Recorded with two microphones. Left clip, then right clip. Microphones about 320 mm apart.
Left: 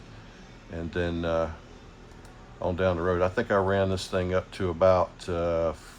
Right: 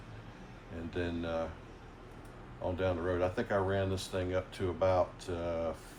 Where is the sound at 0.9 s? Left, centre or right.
Centre.